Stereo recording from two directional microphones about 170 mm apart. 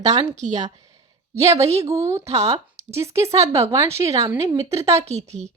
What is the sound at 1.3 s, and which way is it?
Speech, 20° right (ahead or behind).